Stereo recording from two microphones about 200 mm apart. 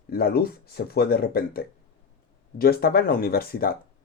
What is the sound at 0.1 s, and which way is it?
Speech, 50° left (ahead or behind).